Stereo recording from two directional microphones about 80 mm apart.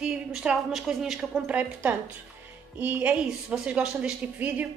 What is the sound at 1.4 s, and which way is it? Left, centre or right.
A woman's voice, centre.